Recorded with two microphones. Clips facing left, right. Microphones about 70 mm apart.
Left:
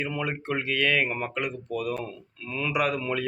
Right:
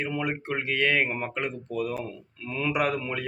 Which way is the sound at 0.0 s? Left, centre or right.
Right.